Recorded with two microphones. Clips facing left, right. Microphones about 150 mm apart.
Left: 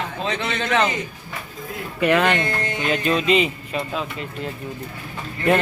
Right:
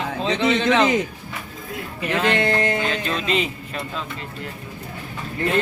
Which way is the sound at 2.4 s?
90° right.